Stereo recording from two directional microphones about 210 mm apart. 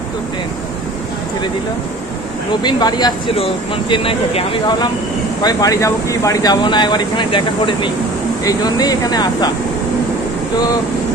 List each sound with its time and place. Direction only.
2.6 s speech: 20° left (ahead or behind)